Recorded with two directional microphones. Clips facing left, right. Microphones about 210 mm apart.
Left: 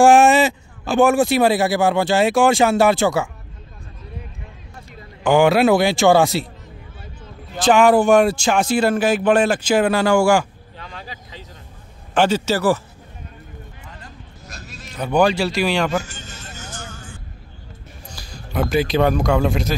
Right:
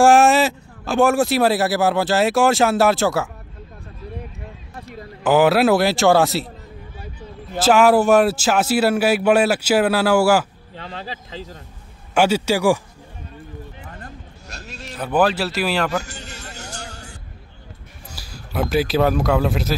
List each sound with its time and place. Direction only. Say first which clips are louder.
0.0 s a man's voice: left 1 dB; centre (ahead or behind)
4.8 s a man's voice: even; 5° right (ahead or behind)
7.5 s a man's voice: even; 5° right (ahead or behind)
10.8 s vehicle: right 4 dB; 30° right (ahead or behind)
12.1 s a man's voice: even; 10° right (ahead or behind)
15.0 s a man's voice: left 2 dB; 5° right (ahead or behind)
16.0 s music: even; 70° right (ahead or behind)
18.1 s speech: left 1 dB; 5° right (ahead or behind)